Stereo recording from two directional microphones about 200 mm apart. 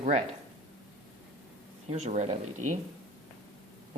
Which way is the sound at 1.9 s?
35° right (ahead or behind).